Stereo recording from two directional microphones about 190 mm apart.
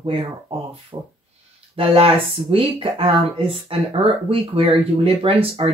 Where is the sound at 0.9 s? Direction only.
20° right (ahead or behind).